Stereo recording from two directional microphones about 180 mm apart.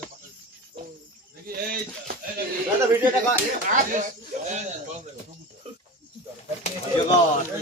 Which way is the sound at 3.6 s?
45° right (ahead or behind).